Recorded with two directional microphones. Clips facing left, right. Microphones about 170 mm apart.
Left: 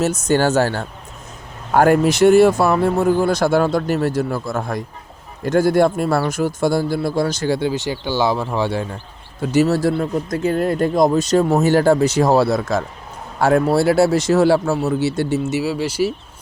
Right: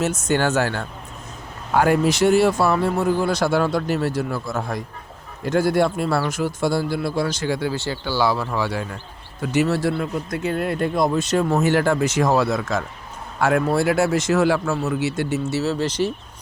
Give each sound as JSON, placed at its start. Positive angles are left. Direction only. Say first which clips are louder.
{"t": 0.0, "sound": "speech", "louder": "left 4 dB", "side_deg": 40}
{"t": 1.7, "sound": "speech", "louder": "left 4 dB", "side_deg": 50}
{"t": 7.7, "sound": "speech", "louder": "left 3 dB", "side_deg": 15}
{"t": 15.4, "sound": "speech", "louder": "left 2 dB", "side_deg": 15}